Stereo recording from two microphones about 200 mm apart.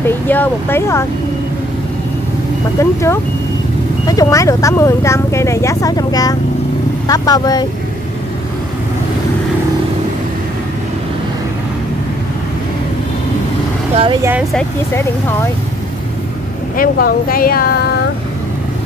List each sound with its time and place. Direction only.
0.0 s speech: 10° left (ahead or behind)
2.8 s speech: 15° left (ahead or behind)
16.7 s speech: 45° left (ahead or behind)